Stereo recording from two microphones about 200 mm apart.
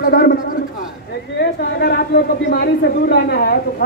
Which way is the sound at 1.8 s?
50° left (ahead or behind).